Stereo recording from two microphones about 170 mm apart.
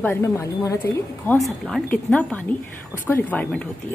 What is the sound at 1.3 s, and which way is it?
A woman's voice, centre (ahead or behind).